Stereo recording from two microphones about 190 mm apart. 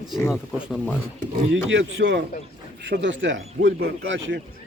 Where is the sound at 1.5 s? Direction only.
90° right.